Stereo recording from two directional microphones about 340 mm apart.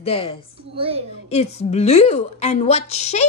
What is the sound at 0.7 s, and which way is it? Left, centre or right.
Speech, centre.